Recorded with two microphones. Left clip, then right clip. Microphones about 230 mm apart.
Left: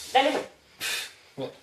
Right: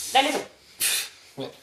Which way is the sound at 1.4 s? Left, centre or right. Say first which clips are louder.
Even; right.